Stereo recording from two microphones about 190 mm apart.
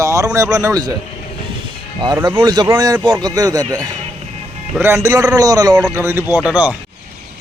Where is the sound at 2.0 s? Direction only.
20° right (ahead or behind).